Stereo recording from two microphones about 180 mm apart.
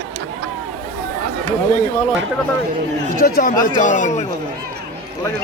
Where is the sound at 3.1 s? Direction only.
55° left (ahead or behind).